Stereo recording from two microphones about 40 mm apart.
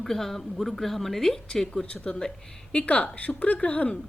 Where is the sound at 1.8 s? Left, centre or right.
Left.